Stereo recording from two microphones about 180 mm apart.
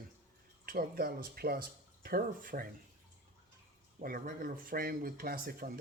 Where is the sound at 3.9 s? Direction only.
55° right (ahead or behind).